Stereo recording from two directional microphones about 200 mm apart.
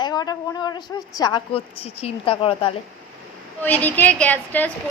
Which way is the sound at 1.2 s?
20° left (ahead or behind).